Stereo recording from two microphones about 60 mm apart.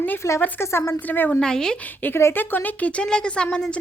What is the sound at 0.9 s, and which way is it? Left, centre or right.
Speech, left.